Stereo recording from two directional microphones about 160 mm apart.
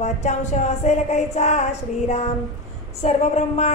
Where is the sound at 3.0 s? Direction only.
45° left (ahead or behind).